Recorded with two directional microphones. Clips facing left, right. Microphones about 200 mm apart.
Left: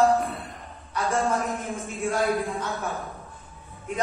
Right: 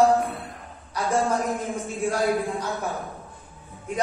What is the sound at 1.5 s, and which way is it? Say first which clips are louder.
A man's voice: right 3 dB; 15° right (ahead or behind).